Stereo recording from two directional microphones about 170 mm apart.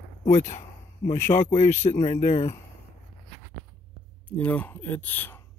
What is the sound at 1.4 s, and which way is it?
Speech, 45° left (ahead or behind).